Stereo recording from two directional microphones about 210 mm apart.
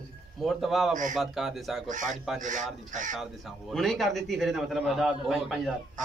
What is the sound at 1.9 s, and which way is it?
Speech, 35° right (ahead or behind).